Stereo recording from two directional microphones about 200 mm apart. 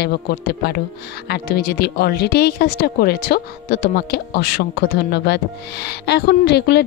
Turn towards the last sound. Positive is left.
turn(degrees=55)  # may be behind; listen again after turning